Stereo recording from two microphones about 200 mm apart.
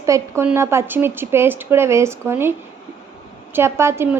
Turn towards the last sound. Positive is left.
turn(degrees=-10)  # may be behind; listen again after turning